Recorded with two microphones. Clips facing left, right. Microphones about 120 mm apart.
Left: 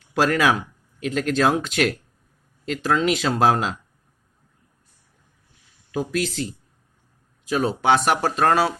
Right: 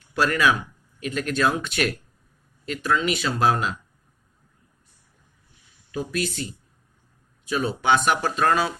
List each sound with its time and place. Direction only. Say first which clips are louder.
0.1 s speech: left 2 dB; 80° left
0.9 s speech: left 4 dB; 90° left
2.6 s speech: left 3 dB; 75° left (ahead or behind)
5.9 s speech: left 3 dB; 90° left
7.4 s speech: left 3 dB; 75° left (ahead or behind); by 8.7 s 60° left (ahead or behind)